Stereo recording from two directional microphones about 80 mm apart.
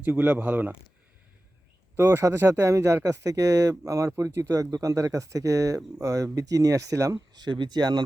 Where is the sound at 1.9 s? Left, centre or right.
Right.